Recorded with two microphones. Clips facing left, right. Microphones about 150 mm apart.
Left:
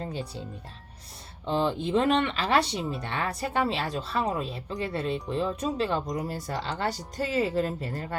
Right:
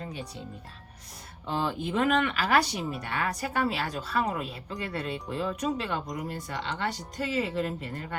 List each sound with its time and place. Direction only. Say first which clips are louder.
0.0 s speech: left 4 dB; 30° left (ahead or behind)
1.5 s speech: left 4 dB; 30° left (ahead or behind)